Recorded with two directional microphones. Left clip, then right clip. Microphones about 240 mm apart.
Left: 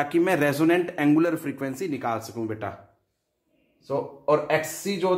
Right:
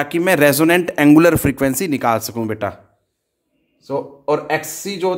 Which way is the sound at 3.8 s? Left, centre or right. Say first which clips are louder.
Right 4 dB; right.